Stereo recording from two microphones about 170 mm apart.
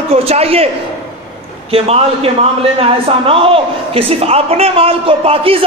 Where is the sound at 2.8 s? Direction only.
35° right (ahead or behind).